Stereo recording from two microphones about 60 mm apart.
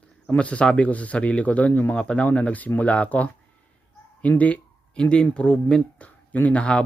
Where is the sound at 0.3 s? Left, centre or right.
Centre.